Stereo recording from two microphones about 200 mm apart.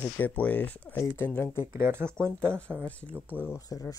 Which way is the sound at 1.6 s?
10° right (ahead or behind).